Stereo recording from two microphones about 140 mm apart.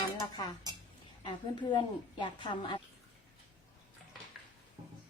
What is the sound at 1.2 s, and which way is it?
A woman's voice, 35° left (ahead or behind).